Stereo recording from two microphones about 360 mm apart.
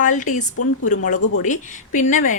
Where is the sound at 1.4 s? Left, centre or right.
Left.